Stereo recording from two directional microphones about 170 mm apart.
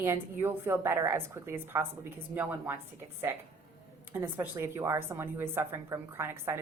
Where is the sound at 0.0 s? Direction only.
15° right (ahead or behind).